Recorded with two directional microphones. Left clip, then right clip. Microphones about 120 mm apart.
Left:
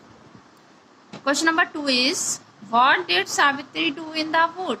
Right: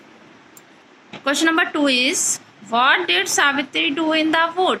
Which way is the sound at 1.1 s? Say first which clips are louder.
Right 3 dB; 20° right (ahead or behind).